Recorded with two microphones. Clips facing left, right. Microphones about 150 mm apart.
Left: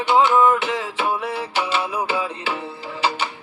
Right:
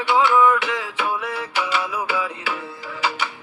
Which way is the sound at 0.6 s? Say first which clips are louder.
Left 2 dB; 30° left (ahead or behind).